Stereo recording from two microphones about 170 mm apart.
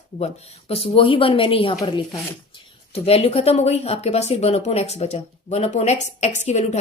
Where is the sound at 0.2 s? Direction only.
40° left (ahead or behind).